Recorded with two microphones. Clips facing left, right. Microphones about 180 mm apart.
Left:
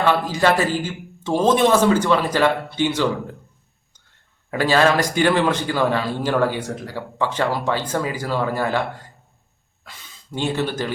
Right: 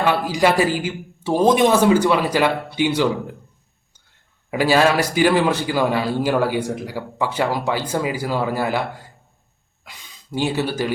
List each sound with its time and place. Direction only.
0.0 s speech: 10° right (ahead or behind)
4.5 s speech: 10° right (ahead or behind)
10.3 s speech: 10° right (ahead or behind)